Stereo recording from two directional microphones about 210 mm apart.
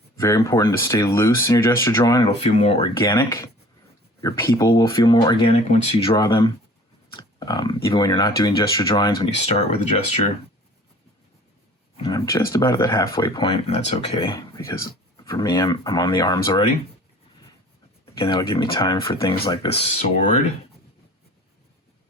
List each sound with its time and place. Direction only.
0.2 s speech: 15° left (ahead or behind)
2.3 s speech: 30° left (ahead or behind)
11.9 s speech: 25° left (ahead or behind)
12.2 s speech: 15° left (ahead or behind)
14.3 s speech: 15° left (ahead or behind)
18.0 s speech: 20° left (ahead or behind)